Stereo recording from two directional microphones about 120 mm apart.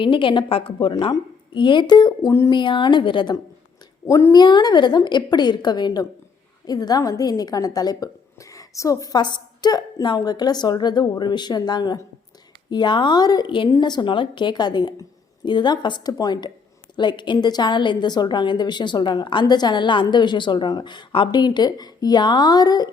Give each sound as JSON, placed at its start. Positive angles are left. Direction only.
{"t": 0.0, "sound": "a woman's voice", "side_deg": 45}
{"t": 4.0, "sound": "speech", "side_deg": 25}
{"t": 4.4, "sound": "a woman's voice", "side_deg": 40}